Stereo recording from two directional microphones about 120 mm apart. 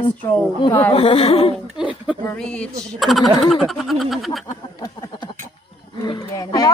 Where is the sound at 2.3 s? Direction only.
10° left (ahead or behind).